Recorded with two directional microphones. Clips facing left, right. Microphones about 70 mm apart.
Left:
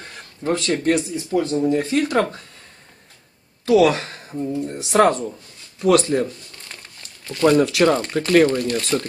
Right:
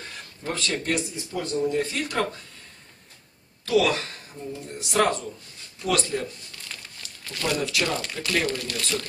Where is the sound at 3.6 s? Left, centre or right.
Left.